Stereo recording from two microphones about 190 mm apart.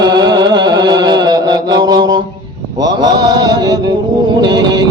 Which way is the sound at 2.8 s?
20° right (ahead or behind).